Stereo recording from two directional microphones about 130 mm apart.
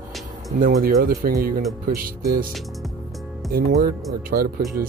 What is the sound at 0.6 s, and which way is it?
Speech, 90° right.